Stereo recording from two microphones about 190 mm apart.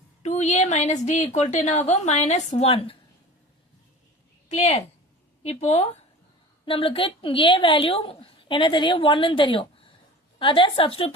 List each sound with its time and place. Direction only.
0.2 s a woman's voice: 35° left (ahead or behind)
4.4 s a woman's voice: 35° left (ahead or behind)